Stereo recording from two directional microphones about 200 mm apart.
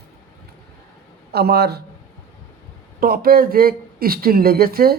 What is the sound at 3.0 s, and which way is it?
Speech, 45° right (ahead or behind).